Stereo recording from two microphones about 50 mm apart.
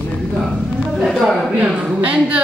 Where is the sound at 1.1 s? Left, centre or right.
Centre.